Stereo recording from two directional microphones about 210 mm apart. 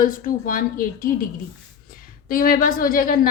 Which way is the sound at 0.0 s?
40° left (ahead or behind).